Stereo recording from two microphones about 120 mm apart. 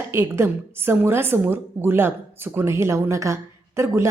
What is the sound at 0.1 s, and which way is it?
A woman's voice, 20° right (ahead or behind).